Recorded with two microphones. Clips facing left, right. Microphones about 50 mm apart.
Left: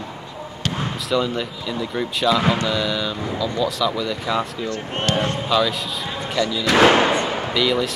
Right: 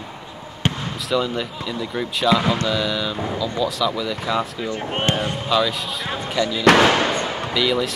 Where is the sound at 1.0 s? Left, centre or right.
Centre.